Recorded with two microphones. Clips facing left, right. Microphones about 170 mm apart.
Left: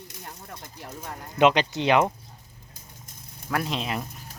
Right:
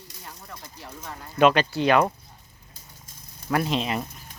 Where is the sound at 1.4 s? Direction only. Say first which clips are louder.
Right 1 dB; 20° left (ahead or behind).